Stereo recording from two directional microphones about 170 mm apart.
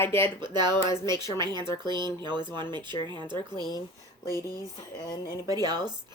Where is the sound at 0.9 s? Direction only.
15° left (ahead or behind).